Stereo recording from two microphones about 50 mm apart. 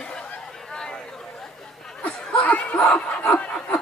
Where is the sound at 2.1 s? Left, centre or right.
Centre.